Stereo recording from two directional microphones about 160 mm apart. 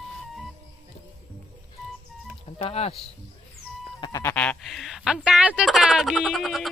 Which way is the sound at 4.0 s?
20° left (ahead or behind).